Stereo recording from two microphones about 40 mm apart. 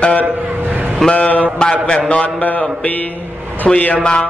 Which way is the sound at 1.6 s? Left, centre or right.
Left.